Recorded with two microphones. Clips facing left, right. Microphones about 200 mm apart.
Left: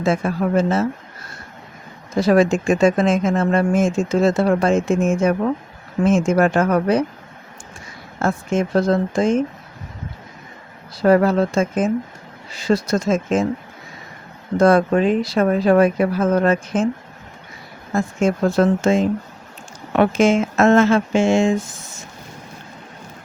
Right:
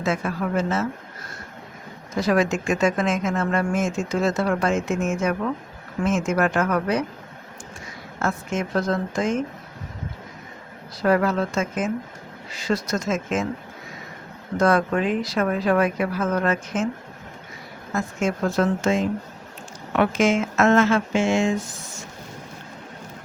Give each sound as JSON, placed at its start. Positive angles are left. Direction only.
{"t": 0.0, "sound": "speech", "side_deg": 30}
{"t": 2.1, "sound": "speech", "side_deg": 30}
{"t": 8.2, "sound": "speech", "side_deg": 30}
{"t": 11.0, "sound": "speech", "side_deg": 30}
{"t": 14.6, "sound": "speech", "side_deg": 30}
{"t": 17.9, "sound": "speech", "side_deg": 30}